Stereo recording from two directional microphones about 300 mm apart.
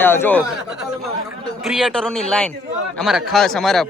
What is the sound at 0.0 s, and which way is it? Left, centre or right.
A man's voice, centre.